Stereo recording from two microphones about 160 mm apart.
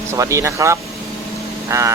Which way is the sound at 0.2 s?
20° right (ahead or behind).